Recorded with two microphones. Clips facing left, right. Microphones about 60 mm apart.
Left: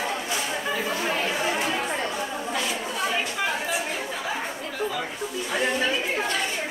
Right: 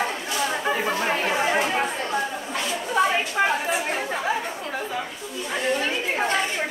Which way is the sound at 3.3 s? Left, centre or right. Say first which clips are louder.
Right 4 dB; right.